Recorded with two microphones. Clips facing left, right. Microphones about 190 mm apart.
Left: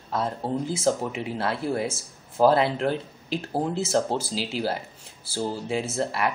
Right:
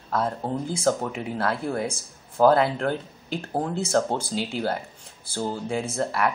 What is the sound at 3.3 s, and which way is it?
Speech, 5° left (ahead or behind).